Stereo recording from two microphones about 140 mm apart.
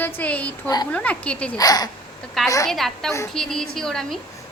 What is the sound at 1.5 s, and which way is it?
Speech, 25° left (ahead or behind).